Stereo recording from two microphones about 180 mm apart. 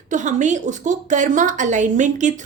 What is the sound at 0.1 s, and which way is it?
A woman's voice, 45° right (ahead or behind).